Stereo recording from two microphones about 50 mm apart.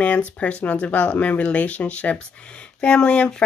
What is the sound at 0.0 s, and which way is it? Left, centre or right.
Speech, left.